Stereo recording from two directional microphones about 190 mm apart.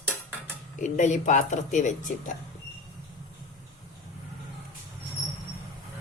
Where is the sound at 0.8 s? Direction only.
40° left (ahead or behind).